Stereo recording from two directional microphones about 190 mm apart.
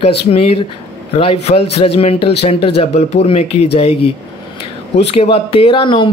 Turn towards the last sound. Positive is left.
turn(degrees=25)  # may be behind; listen again after turning